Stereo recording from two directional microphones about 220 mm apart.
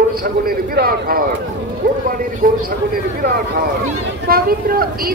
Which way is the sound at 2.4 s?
40° right (ahead or behind).